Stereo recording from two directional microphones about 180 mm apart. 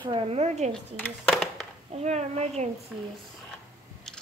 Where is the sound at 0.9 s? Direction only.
5° left (ahead or behind).